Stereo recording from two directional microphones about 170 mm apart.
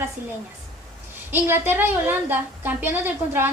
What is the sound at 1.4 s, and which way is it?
A woman's voice, 10° right (ahead or behind).